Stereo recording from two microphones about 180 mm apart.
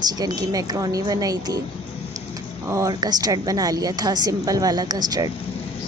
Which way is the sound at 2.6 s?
20° right (ahead or behind).